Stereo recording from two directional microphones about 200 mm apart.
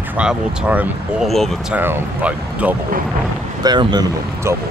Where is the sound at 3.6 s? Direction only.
20° right (ahead or behind).